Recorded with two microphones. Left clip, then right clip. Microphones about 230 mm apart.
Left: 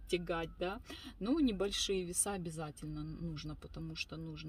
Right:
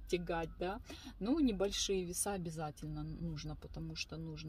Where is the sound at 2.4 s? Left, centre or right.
Centre.